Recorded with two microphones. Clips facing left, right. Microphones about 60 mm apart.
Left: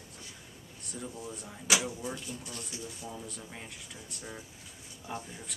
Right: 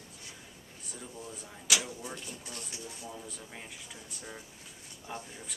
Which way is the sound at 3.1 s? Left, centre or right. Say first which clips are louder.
Left 2 dB; centre.